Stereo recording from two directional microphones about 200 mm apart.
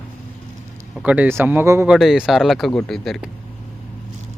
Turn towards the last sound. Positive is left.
turn(degrees=0)  # may be behind; listen again after turning